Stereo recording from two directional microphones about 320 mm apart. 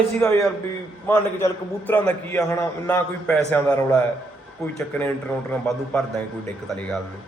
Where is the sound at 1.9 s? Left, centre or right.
Centre.